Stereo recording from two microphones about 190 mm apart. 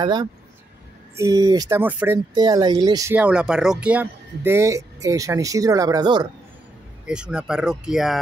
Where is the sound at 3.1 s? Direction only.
5° right (ahead or behind); by 6.3 s 20° right (ahead or behind).